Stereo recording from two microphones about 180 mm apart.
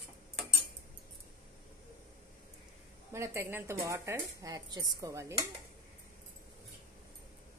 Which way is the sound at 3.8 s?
15° right (ahead or behind).